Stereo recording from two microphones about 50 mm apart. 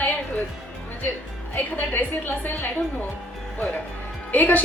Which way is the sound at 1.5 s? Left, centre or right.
Left.